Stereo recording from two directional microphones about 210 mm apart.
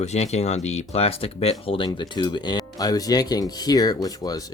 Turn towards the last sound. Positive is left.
turn(degrees=20)  # may be behind; listen again after turning